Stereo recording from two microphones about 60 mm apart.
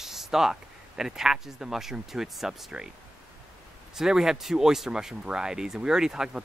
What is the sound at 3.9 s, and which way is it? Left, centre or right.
Speech, centre.